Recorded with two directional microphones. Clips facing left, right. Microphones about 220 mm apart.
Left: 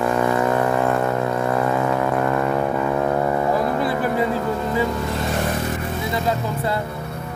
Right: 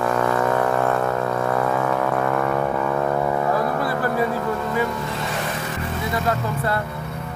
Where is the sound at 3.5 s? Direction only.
20° left (ahead or behind).